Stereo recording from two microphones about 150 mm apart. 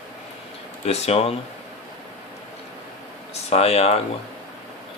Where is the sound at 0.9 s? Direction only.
45° left (ahead or behind).